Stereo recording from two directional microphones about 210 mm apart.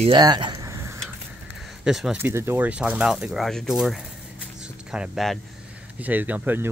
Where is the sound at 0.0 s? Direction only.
20° right (ahead or behind).